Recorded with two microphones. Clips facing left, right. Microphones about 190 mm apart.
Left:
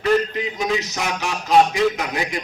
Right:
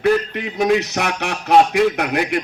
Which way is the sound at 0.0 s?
60° right (ahead or behind).